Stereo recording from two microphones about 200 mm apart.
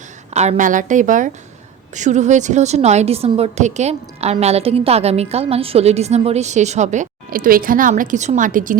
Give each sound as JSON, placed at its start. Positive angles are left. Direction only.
{"t": 0.3, "sound": "a woman's voice", "side_deg": -35}